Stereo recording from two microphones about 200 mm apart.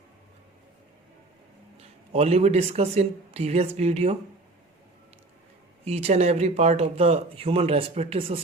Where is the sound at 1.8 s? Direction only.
30° right (ahead or behind).